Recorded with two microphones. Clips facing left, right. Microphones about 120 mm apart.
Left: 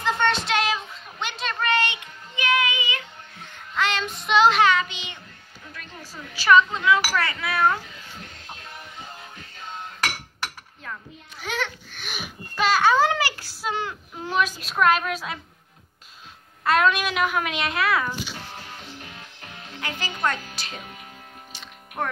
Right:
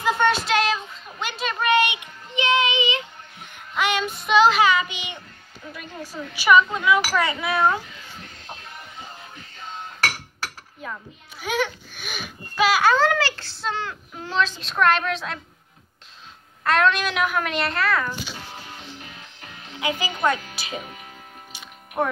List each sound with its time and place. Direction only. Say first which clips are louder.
0.0 s a sound: right 3 dB; 5° right (ahead or behind)
1.2 s child singing: right 2 dB; 5° right (ahead or behind)
6.3 s a child's voice: even; 15° right (ahead or behind)
10.8 s a child's voice: right 3 dB; 10° right (ahead or behind)
13.1 s a child's voice: right 2 dB; 15° left (ahead or behind)
16.6 s a woman's voice: even; 5° left (ahead or behind)
19.8 s a child's voice: right 4 dB; 10° right (ahead or behind)
21.5 s music: right 1 dB; 10° right (ahead or behind)